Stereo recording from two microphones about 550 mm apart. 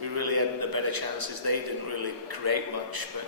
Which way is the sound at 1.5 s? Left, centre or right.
Right.